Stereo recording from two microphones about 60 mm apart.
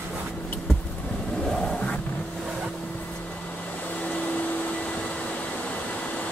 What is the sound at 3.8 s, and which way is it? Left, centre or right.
Vacuum cleaner, left.